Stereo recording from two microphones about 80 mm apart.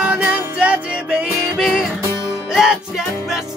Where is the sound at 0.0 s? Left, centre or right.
Centre.